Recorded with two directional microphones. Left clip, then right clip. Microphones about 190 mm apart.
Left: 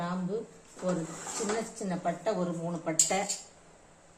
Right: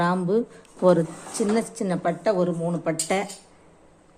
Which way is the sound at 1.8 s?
50° right (ahead or behind).